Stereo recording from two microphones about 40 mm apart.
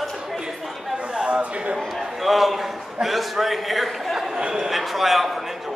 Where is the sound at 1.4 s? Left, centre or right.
Right.